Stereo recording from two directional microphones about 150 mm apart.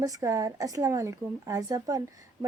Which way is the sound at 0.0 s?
20° right (ahead or behind).